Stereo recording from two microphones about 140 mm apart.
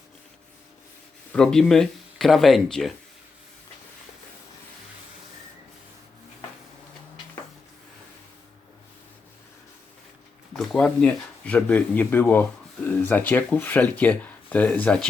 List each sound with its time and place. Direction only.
1.3 s speech: 5° left (ahead or behind)
10.5 s speech: 5° left (ahead or behind)